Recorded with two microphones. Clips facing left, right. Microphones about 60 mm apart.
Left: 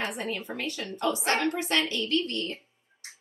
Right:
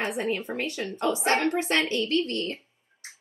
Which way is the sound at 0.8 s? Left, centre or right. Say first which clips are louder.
Right 2 dB; right.